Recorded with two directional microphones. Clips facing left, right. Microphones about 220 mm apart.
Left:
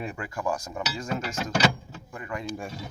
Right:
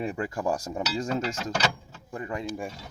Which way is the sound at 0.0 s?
30° right (ahead or behind).